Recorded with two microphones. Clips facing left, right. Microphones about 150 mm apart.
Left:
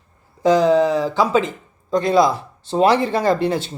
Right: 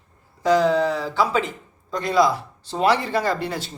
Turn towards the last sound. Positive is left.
turn(degrees=25)  # may be behind; listen again after turning